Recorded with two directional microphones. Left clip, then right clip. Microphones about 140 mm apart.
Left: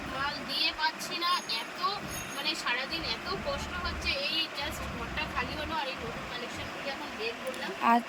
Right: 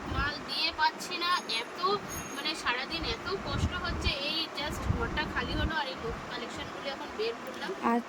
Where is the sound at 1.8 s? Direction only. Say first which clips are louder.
Right 3 dB; 15° right (ahead or behind).